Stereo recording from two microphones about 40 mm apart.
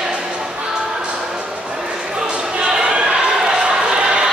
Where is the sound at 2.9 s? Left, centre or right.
Right.